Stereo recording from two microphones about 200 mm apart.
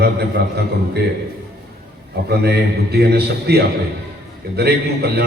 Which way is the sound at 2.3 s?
55° right (ahead or behind).